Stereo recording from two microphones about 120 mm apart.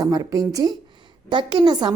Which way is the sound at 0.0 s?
30° right (ahead or behind).